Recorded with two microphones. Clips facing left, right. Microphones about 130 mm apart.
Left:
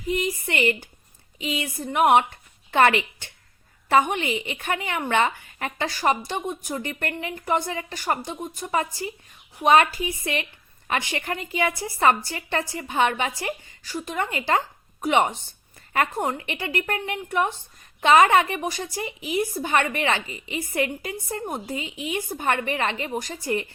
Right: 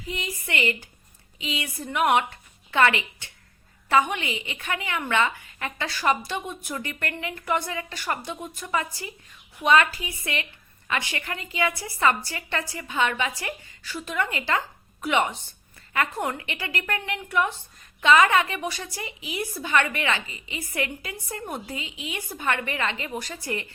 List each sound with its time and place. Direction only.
0.1 s a woman's voice: 45° left (ahead or behind)
3.9 s a woman's voice: 45° left (ahead or behind)
7.9 s a woman's voice: 40° left (ahead or behind)